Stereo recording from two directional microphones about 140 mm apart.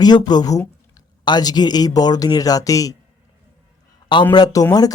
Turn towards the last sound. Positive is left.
turn(degrees=25)  # may be behind; listen again after turning